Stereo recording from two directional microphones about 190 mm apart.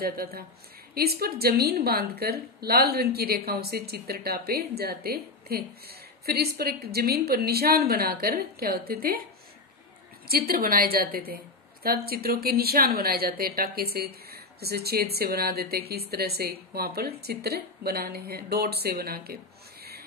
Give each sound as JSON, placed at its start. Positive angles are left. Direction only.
{"t": 0.0, "sound": "a woman's voice", "side_deg": -50}
{"t": 10.2, "sound": "a woman's voice", "side_deg": -50}